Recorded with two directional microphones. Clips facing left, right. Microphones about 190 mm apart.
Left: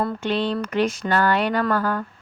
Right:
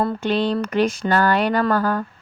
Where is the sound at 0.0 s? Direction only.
40° right (ahead or behind).